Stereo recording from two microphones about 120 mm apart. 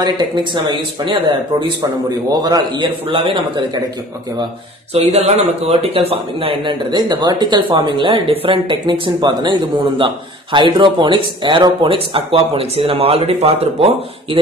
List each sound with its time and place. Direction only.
0.0 s a man's voice: 40° right (ahead or behind)
3.1 s speech: 50° right (ahead or behind)
4.9 s speech: 60° right (ahead or behind)